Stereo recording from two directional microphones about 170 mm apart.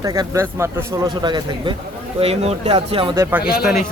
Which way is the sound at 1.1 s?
25° right (ahead or behind).